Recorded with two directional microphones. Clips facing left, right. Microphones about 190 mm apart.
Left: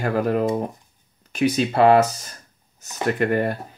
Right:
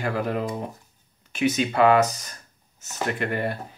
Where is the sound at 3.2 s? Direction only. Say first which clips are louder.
Left 7 dB; 45° left (ahead or behind).